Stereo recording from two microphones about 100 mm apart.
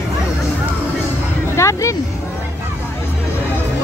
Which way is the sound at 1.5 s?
30° left (ahead or behind).